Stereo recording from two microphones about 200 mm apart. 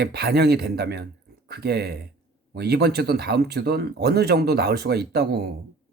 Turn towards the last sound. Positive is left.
turn(degrees=-55)  # may be behind; listen again after turning